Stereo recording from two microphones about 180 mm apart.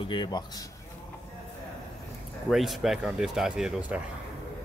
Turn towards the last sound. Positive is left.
turn(degrees=-5)  # may be behind; listen again after turning